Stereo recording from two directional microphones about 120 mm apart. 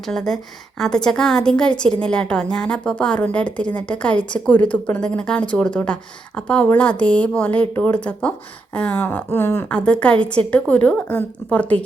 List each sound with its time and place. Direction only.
0.0 s a woman's voice: 5° left (ahead or behind)